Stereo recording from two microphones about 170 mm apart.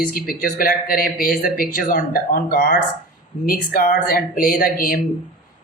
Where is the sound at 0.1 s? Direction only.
60° left (ahead or behind).